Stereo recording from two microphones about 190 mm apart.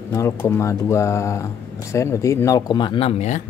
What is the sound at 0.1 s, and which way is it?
Speech, 15° left (ahead or behind).